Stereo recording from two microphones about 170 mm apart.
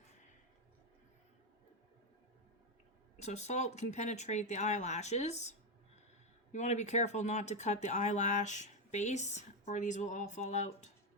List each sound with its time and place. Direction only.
3.2 s speech: 40° left (ahead or behind)
6.5 s speech: 45° left (ahead or behind)